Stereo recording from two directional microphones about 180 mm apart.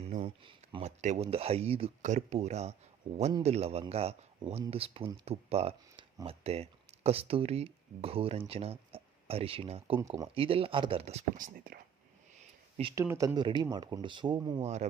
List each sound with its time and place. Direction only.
0.0 s a sound: 30° right (ahead or behind)
0.9 s speech: 40° right (ahead or behind)
10.0 s speech: 20° right (ahead or behind)
10.3 s speech: 30° right (ahead or behind); by 11.8 s 55° right (ahead or behind)
13.0 s speech: 20° right (ahead or behind)
14.6 s speech: 40° right (ahead or behind)